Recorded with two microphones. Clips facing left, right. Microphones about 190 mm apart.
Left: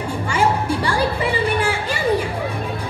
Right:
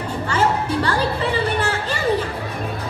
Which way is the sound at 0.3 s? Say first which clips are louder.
Left 1 dB; 10° left (ahead or behind).